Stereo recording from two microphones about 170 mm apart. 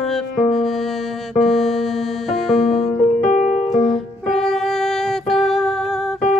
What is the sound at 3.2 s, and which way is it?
Keyboard, 45° left (ahead or behind).